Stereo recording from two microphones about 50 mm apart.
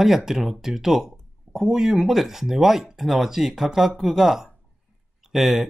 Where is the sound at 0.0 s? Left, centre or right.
Centre.